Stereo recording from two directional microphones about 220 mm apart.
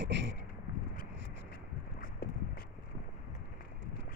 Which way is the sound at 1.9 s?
40° left (ahead or behind).